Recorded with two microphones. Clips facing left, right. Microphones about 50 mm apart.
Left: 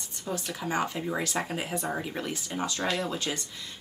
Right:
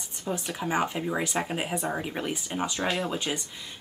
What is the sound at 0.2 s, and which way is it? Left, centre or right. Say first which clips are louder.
Speech: right 2 dB; centre.